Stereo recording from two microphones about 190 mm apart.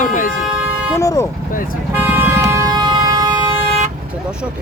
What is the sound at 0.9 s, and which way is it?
Speech, 15° left (ahead or behind).